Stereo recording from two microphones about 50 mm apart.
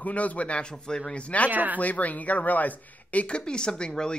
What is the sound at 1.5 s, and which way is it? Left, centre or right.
Speech, right.